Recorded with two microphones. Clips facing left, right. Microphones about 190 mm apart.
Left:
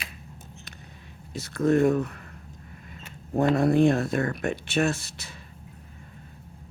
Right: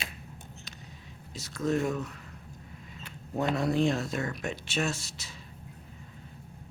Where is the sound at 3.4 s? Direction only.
55° left (ahead or behind).